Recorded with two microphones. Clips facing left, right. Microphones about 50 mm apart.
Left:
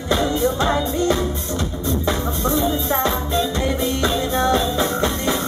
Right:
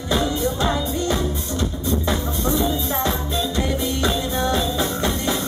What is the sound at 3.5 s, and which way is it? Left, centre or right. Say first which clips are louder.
Music: left 2 dB; centre.